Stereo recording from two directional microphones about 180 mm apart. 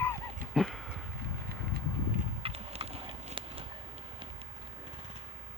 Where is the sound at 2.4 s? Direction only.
35° right (ahead or behind).